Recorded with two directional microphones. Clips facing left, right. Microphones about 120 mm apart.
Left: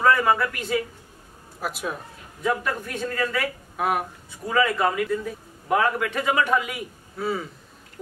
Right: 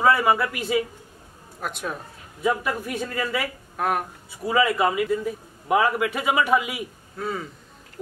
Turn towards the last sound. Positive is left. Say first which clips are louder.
# left 2 dB
turn(degrees=5)  # may be behind; listen again after turning